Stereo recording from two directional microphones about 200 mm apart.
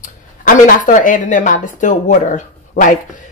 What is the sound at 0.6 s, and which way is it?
Speech, 40° left (ahead or behind).